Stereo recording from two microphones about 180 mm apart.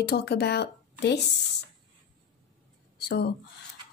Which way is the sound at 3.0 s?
65° left (ahead or behind).